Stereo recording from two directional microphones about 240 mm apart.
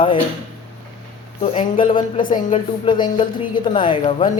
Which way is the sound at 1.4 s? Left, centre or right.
Left.